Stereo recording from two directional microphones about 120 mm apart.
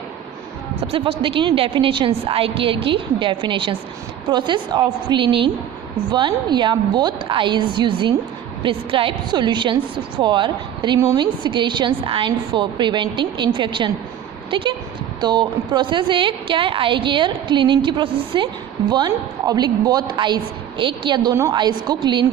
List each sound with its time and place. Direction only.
0.8 s a woman's voice: 55° right (ahead or behind)